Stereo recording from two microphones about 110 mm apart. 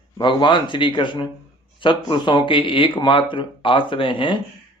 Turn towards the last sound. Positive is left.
turn(degrees=50)  # may be behind; listen again after turning